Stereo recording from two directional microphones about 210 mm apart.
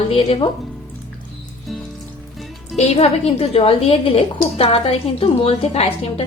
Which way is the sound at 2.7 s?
30° left (ahead or behind).